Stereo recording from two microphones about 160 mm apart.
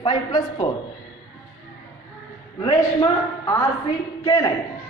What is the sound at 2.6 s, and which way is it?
A woman's voice, 25° left (ahead or behind).